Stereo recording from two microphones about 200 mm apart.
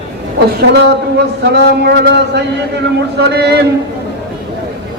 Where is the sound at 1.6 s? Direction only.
55° right (ahead or behind).